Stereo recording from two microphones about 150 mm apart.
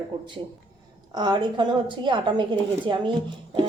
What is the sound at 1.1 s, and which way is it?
A woman's voice, 30° right (ahead or behind).